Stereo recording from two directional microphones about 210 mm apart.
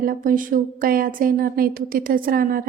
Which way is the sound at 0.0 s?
40° right (ahead or behind).